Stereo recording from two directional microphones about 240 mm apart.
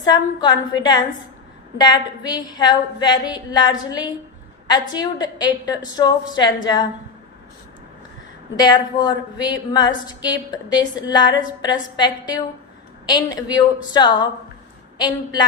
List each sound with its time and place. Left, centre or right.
0.0 s a woman's voice: centre
8.5 s a woman's voice: centre